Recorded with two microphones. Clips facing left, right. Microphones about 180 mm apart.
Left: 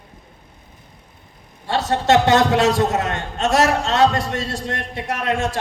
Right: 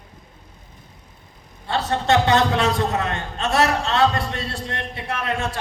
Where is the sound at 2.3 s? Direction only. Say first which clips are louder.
Left 4 dB; 45° left (ahead or behind).